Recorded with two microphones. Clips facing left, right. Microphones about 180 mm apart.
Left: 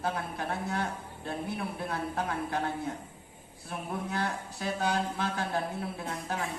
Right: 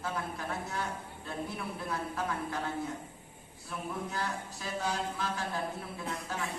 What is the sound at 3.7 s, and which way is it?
A man's voice, 60° left (ahead or behind).